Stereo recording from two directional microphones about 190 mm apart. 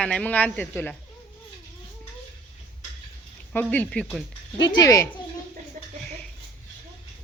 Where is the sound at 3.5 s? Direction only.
5° left (ahead or behind).